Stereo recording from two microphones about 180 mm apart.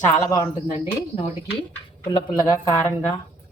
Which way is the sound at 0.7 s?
35° left (ahead or behind).